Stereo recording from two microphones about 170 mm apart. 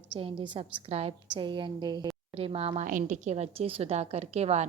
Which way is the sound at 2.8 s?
50° right (ahead or behind).